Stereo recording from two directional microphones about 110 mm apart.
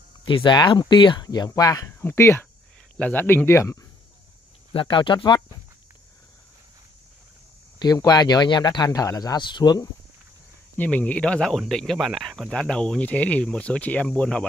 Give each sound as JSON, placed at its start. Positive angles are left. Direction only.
{"t": 0.2, "sound": "speech", "side_deg": 45}
{"t": 4.7, "sound": "speech", "side_deg": 45}
{"t": 7.8, "sound": "speech", "side_deg": 40}
{"t": 10.8, "sound": "speech", "side_deg": 15}